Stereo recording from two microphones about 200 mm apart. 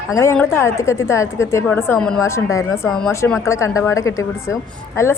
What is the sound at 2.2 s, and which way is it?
A woman's voice, 15° left (ahead or behind).